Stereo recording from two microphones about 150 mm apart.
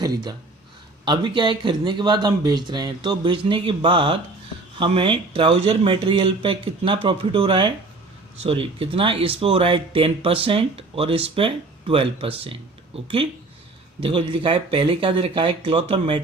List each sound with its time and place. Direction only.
0.0 s speech: 25° right (ahead or behind)
14.0 s speech: 35° right (ahead or behind)